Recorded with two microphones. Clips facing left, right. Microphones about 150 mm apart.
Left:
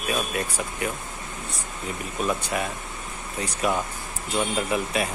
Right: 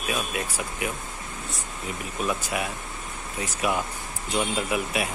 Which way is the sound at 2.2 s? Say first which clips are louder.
Left 2 dB; 5° right (ahead or behind).